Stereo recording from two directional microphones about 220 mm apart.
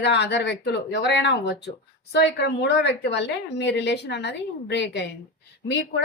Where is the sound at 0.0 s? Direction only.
50° left (ahead or behind).